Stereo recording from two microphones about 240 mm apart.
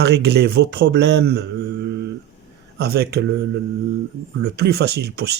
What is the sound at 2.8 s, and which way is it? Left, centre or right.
Speech, right.